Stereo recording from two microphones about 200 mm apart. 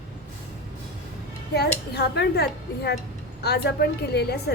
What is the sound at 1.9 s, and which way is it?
A woman's voice, 55° left (ahead or behind).